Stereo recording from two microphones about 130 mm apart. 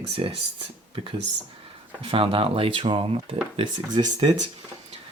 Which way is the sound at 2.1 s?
45° right (ahead or behind).